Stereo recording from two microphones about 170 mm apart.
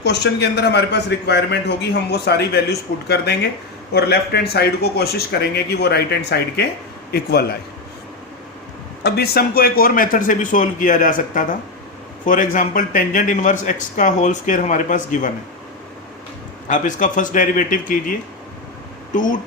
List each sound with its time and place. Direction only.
0.0 s a man's voice: 80° left
9.0 s speech: 70° left (ahead or behind); by 15.3 s 50° left (ahead or behind)
16.6 s speech: 50° left (ahead or behind)
19.1 s speech: 50° left (ahead or behind)